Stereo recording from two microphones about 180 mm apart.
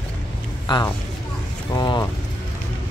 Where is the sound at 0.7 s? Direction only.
25° left (ahead or behind).